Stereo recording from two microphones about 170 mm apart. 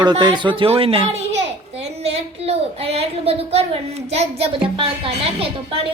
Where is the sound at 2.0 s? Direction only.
35° right (ahead or behind).